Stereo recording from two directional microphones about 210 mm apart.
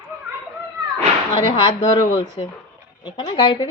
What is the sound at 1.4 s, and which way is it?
A woman's voice, 25° left (ahead or behind).